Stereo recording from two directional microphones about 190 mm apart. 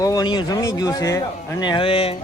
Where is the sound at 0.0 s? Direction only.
20° left (ahead or behind).